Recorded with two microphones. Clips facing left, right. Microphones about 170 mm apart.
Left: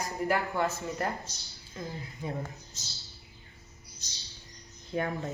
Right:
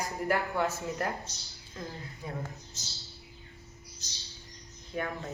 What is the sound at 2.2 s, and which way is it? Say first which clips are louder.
Speech: left 4 dB; 25° left (ahead or behind).